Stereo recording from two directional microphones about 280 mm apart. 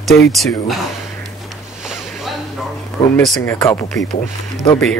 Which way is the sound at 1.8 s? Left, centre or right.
Centre.